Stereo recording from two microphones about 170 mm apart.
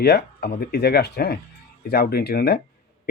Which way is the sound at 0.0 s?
70° left (ahead or behind).